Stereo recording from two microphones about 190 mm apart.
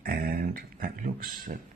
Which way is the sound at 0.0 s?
50° right (ahead or behind).